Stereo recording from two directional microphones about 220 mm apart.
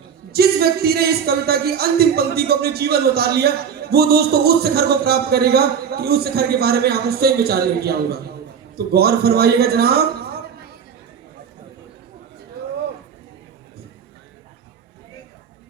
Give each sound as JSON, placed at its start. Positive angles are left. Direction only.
{"t": 0.3, "sound": "speech", "side_deg": -45}